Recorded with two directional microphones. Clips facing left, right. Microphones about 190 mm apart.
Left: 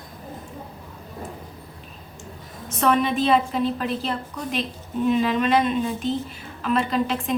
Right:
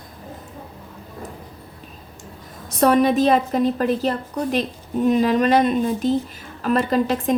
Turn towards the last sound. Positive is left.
turn(degrees=-40)  # may be behind; listen again after turning